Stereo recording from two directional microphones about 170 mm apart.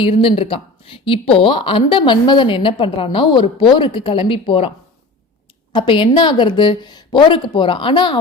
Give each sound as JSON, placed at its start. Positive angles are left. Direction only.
{"t": 0.0, "sound": "speech", "side_deg": 30}
{"t": 5.7, "sound": "a woman's voice", "side_deg": 30}